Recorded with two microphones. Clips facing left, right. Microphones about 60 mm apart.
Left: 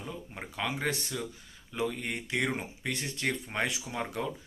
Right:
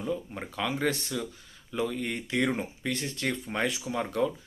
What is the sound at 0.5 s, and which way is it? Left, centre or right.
Speech, left.